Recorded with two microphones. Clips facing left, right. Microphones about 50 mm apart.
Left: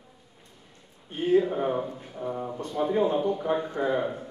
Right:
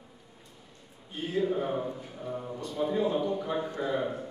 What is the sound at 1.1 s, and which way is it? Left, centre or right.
Speech, left.